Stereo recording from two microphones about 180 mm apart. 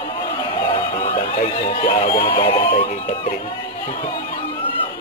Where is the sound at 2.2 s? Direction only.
30° left (ahead or behind).